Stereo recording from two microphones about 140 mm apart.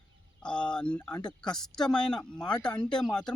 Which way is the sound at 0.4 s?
5° left (ahead or behind).